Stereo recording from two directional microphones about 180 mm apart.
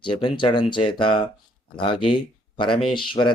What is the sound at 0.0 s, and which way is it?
Speech, 25° left (ahead or behind).